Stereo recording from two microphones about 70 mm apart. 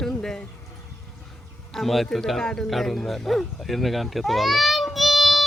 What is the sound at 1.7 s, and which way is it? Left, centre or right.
A man's voice, centre.